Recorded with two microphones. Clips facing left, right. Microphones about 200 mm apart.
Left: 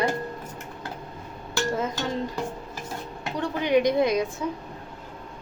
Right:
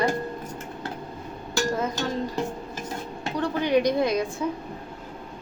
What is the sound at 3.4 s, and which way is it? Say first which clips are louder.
Speech: even; 20° left (ahead or behind).